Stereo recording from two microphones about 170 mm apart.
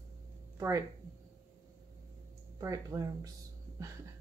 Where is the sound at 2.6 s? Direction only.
20° right (ahead or behind).